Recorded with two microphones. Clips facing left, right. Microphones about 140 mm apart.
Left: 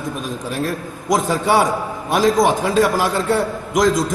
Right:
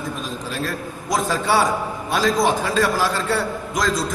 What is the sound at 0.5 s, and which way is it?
A man's voice, 20° left (ahead or behind).